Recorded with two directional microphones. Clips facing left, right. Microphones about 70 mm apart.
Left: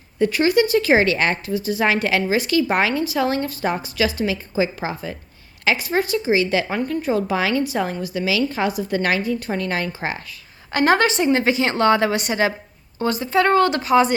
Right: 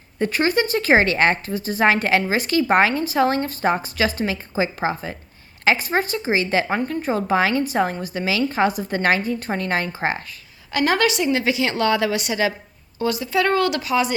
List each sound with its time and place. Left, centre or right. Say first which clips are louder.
0.2 s a woman's voice: left 3 dB; right
10.7 s a woman's voice: left 2 dB; left